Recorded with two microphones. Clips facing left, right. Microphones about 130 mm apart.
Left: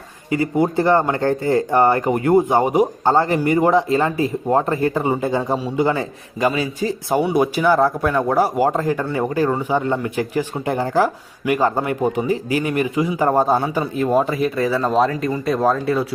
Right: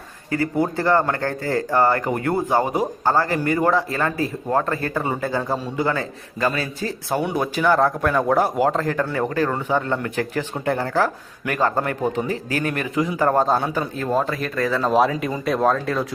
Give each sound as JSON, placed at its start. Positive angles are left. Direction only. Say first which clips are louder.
{"t": 0.3, "sound": "speech", "louder": "left 3 dB", "side_deg": 15}
{"t": 14.8, "sound": "speech", "louder": "right 1 dB", "side_deg": 0}